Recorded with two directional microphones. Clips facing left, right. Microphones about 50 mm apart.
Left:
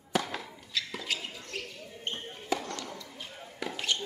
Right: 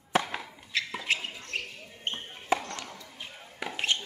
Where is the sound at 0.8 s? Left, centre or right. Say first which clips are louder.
Right 4 dB; right.